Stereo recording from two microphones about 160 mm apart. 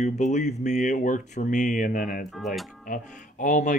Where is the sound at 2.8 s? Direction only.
55° left (ahead or behind).